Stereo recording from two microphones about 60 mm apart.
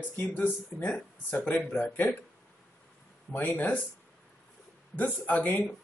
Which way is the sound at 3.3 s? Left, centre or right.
Left.